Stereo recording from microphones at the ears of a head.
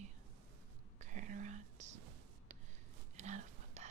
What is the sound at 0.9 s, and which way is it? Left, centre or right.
Whispering, right.